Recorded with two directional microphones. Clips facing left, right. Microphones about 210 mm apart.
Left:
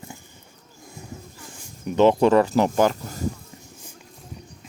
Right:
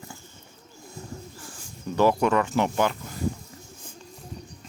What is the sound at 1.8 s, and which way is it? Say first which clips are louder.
Speech: left 5 dB; 20° left (ahead or behind).